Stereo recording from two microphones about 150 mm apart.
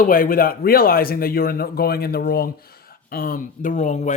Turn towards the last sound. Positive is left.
turn(degrees=55)  # may be behind; listen again after turning